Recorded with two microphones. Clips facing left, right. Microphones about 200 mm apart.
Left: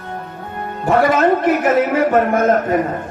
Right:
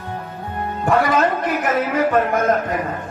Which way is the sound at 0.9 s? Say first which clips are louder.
Left 4 dB; 25° left (ahead or behind).